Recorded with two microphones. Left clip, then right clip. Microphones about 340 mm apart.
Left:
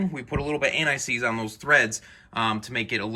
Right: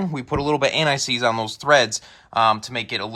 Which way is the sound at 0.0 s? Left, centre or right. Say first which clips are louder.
Right 6 dB; centre.